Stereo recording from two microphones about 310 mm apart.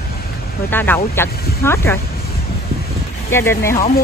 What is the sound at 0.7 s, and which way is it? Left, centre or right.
Speech, centre.